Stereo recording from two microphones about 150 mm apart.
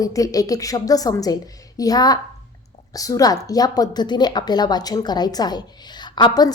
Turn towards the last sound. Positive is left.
turn(degrees=30)  # may be behind; listen again after turning